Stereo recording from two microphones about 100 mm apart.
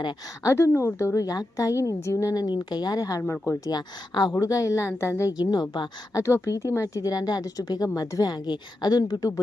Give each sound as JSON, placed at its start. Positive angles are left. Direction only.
{"t": 0.4, "sound": "a woman's voice", "side_deg": 25}
{"t": 3.7, "sound": "a woman's voice", "side_deg": 45}
{"t": 5.4, "sound": "a woman's voice", "side_deg": 45}
{"t": 6.1, "sound": "a woman's voice", "side_deg": 30}